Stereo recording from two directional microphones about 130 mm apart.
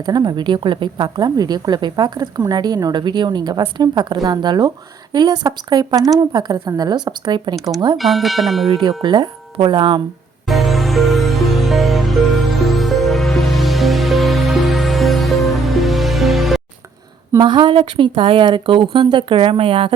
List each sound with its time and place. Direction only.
0.0 s a woman's voice: 35° right (ahead or behind)
7.9 s speech: centre (ahead or behind)
8.8 s a woman's voice: 35° right (ahead or behind)
10.4 s music: centre (ahead or behind)
17.3 s a woman's voice: 35° right (ahead or behind)